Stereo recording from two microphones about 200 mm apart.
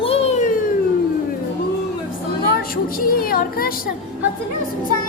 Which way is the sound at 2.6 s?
45° left (ahead or behind).